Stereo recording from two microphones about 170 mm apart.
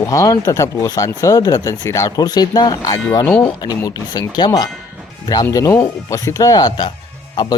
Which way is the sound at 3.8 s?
20° left (ahead or behind).